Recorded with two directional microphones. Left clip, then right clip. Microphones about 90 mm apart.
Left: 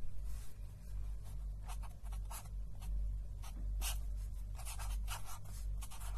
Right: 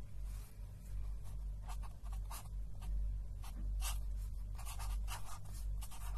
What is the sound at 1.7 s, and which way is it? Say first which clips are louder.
Writing: even; 15° left (ahead or behind).